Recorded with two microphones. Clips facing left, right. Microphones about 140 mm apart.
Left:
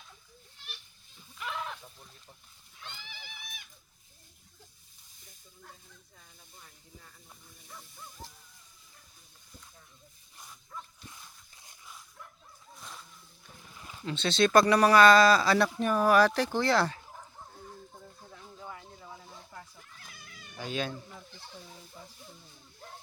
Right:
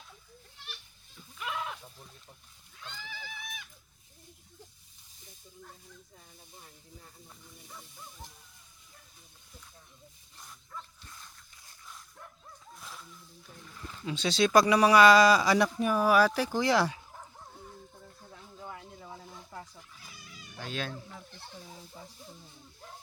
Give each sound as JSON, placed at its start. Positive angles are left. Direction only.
{"t": 1.4, "sound": "goat", "side_deg": -5}
{"t": 8.2, "sound": "speech", "side_deg": -15}
{"t": 10.4, "sound": "dog", "side_deg": 10}
{"t": 12.8, "sound": "zipper", "side_deg": 0}
{"t": 14.0, "sound": "speech", "side_deg": -10}
{"t": 18.0, "sound": "a sound", "side_deg": 0}
{"t": 18.9, "sound": "a sound", "side_deg": -25}
{"t": 20.2, "sound": "cat", "side_deg": 55}
{"t": 20.6, "sound": "speech", "side_deg": 0}